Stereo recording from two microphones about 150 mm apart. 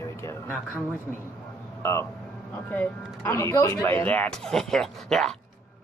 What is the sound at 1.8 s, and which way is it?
Speech, 20° left (ahead or behind).